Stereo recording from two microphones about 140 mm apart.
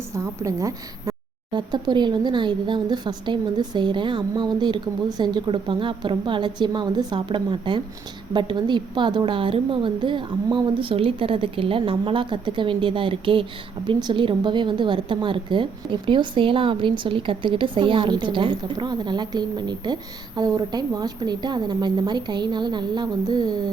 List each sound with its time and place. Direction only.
0.1 s a woman's voice: 20° right (ahead or behind)
1.5 s a woman's voice: 35° right (ahead or behind)